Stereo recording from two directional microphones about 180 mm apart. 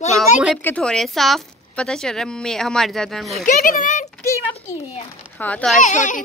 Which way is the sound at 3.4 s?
45° left (ahead or behind).